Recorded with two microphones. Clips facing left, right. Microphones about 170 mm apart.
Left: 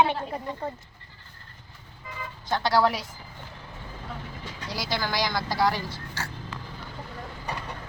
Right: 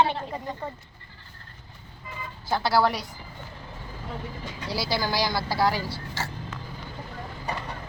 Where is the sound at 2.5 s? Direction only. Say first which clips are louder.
Even; 5° right (ahead or behind).